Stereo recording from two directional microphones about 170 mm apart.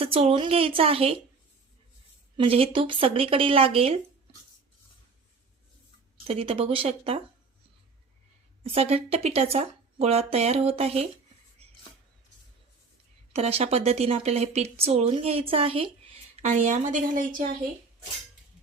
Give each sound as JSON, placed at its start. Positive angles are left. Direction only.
{"t": 0.0, "sound": "speech", "side_deg": -35}
{"t": 2.4, "sound": "speech", "side_deg": -35}
{"t": 6.2, "sound": "speech", "side_deg": -35}
{"t": 8.6, "sound": "speech", "side_deg": -35}
{"t": 13.3, "sound": "a woman's voice", "side_deg": -35}